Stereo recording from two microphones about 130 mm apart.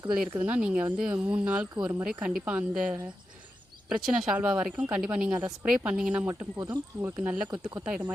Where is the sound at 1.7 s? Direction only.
25° right (ahead or behind).